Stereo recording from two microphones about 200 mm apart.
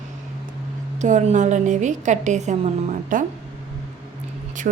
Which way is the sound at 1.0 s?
35° right (ahead or behind).